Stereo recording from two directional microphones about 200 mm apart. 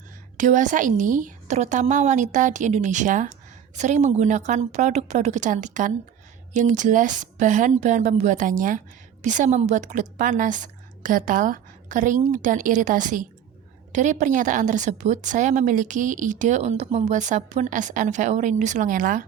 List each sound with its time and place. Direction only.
0.3 s a woman's voice: 40° right (ahead or behind)